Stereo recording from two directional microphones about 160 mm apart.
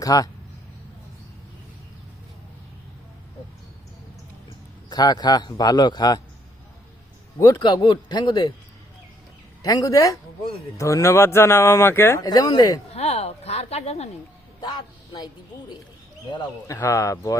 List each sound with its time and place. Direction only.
0.0 s speech: 20° left (ahead or behind)
4.9 s a man's voice: 25° left (ahead or behind)
7.3 s a man's voice: 20° left (ahead or behind)
7.6 s a man's voice: 30° left (ahead or behind)
9.6 s a man's voice: 20° left (ahead or behind)
12.9 s a sound: 40° left (ahead or behind)
14.6 s a man's voice: 30° left (ahead or behind)
16.3 s a man's voice: 20° left (ahead or behind)